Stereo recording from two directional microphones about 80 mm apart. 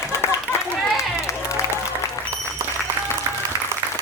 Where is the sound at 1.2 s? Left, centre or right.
Left.